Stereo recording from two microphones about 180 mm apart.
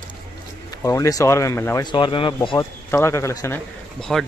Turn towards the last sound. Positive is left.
turn(degrees=5)  # may be behind; listen again after turning